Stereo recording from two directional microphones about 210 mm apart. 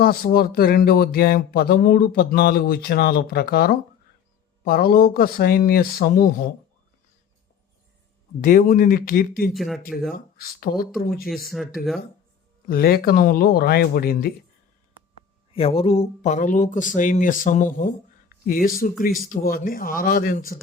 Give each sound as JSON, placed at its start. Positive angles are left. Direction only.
{"t": 0.0, "sound": "speech", "side_deg": 45}
{"t": 8.4, "sound": "speech", "side_deg": 40}
{"t": 9.5, "sound": "speech", "side_deg": 0}
{"t": 10.3, "sound": "speech", "side_deg": 45}
{"t": 11.4, "sound": "speech", "side_deg": 0}
{"t": 12.6, "sound": "speech", "side_deg": 45}
{"t": 15.5, "sound": "speech", "side_deg": 25}